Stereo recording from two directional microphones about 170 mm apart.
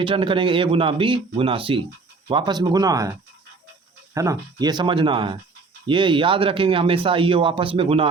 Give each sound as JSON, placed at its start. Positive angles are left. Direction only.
{"t": 0.0, "sound": "speech", "side_deg": -30}